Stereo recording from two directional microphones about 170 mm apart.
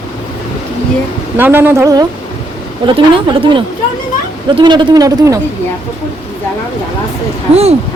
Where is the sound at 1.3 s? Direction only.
15° right (ahead or behind).